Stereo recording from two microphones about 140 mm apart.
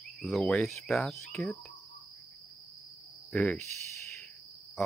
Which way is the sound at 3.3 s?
5° left (ahead or behind).